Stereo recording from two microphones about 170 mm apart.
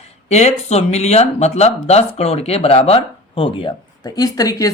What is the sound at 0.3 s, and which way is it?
Speech, 40° left (ahead or behind).